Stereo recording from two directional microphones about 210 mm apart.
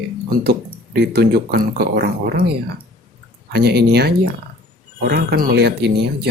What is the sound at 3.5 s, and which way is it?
Speech, 50° right (ahead or behind).